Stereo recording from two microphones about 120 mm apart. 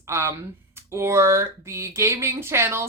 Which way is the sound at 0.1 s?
25° right (ahead or behind).